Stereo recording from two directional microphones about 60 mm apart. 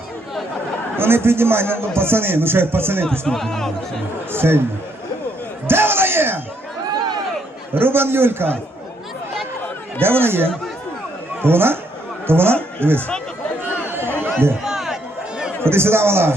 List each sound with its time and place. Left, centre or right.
0.9 s speech: right
3.1 s speech: centre
4.3 s speech: right
5.6 s bellow: right
7.7 s speech: right
10.0 s speech: right
13.8 s chatter: right
14.6 s a sound: centre
15.6 s a man's voice: right